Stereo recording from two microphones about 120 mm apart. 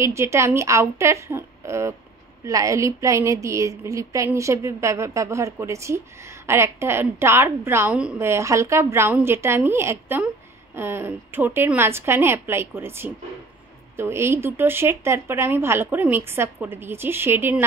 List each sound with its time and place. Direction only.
0.0 s a woman's voice: 20° right (ahead or behind)